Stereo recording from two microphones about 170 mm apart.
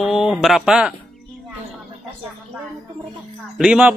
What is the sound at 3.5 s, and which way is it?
Speech, 5° right (ahead or behind).